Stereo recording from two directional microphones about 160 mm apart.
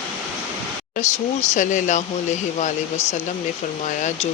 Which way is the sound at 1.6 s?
50° left (ahead or behind).